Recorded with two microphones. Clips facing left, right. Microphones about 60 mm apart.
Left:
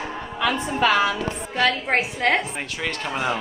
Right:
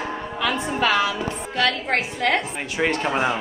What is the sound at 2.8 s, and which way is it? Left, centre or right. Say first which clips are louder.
Speech: right 6 dB; right.